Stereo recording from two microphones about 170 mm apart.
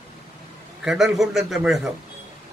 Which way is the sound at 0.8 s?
5° right (ahead or behind).